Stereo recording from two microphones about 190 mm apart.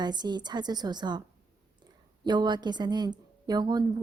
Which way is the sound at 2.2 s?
20° right (ahead or behind).